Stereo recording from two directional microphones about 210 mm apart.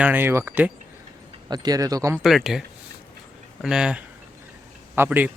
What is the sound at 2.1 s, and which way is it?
A man's voice, centre (ahead or behind).